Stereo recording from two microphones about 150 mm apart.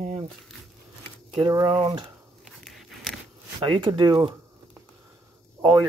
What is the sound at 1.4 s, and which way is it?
Speech, 25° right (ahead or behind).